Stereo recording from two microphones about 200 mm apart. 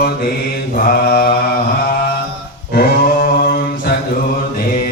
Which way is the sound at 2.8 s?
50° left (ahead or behind).